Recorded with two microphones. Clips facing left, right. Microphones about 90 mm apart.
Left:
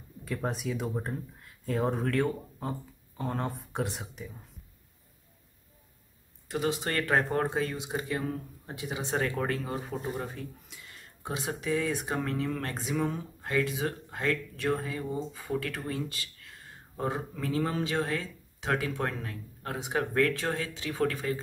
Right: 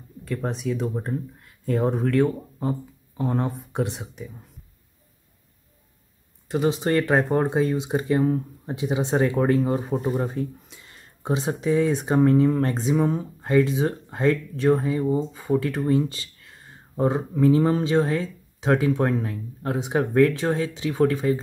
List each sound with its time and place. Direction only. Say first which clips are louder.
0.2 s speech: right 5 dB; 5° left (ahead or behind)
6.5 s speech: right 8 dB; 25° right (ahead or behind)